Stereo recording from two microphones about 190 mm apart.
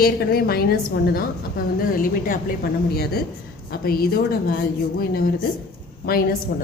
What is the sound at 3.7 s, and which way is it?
Speech, 50° left (ahead or behind).